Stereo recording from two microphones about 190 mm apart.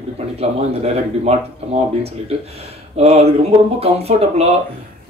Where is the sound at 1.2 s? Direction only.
35° right (ahead or behind).